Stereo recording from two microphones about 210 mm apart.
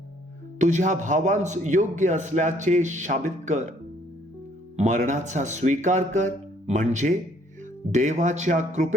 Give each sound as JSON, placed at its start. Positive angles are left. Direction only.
{"t": 0.6, "sound": "a man's voice", "side_deg": -35}
{"t": 4.8, "sound": "a man's voice", "side_deg": -35}